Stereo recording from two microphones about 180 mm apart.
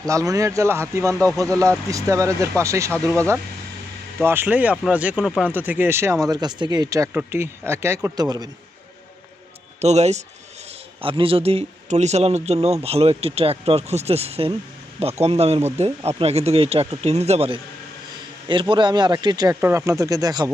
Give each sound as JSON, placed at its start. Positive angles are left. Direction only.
{"t": 0.0, "sound": "speech", "side_deg": -20}
{"t": 9.8, "sound": "a man's voice", "side_deg": -40}